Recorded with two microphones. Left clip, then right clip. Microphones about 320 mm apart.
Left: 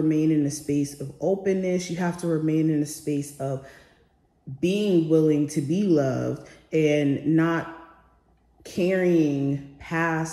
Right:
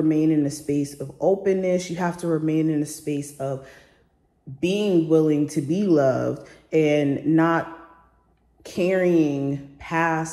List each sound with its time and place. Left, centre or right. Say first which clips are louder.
0.1 s speech: right 2 dB; centre
8.6 s speech: right 2 dB; centre